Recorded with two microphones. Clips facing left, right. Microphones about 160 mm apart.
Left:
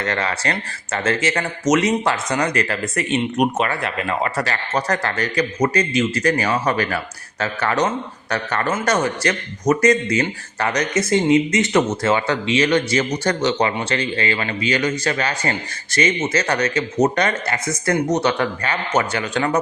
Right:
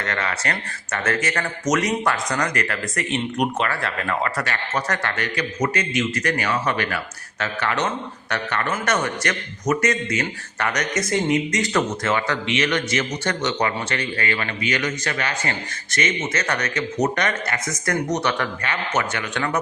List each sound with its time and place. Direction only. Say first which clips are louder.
0.0 s speech: left 4 dB; 30° left (ahead or behind)
4.4 s a man's voice: left 3 dB; 35° left (ahead or behind)